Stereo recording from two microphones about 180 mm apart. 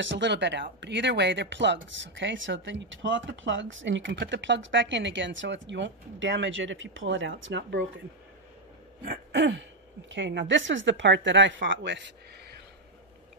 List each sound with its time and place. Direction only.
0.0 s speech: 85° right
9.3 s speech: 90° right